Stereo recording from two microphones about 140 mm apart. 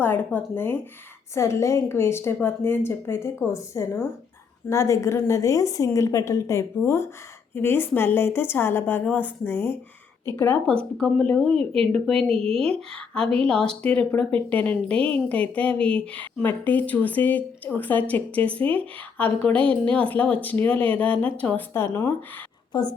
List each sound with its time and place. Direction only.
0.0 s a woman's voice: 15° left (ahead or behind)
22.7 s a woman's voice: 30° left (ahead or behind)